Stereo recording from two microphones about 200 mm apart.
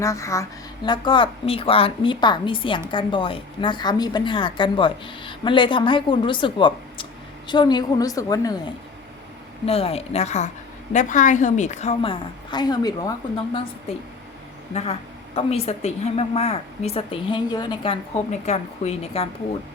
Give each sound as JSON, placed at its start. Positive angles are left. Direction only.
{"t": 0.0, "sound": "a woman's voice", "side_deg": 15}
{"t": 9.6, "sound": "a woman's voice", "side_deg": 30}
{"t": 14.7, "sound": "a woman's voice", "side_deg": 30}
{"t": 18.3, "sound": "a woman's voice", "side_deg": 35}